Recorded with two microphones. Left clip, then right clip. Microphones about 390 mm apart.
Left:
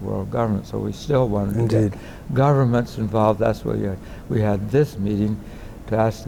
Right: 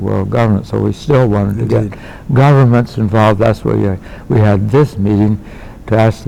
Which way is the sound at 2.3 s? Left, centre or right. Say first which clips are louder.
Right 8 dB; right.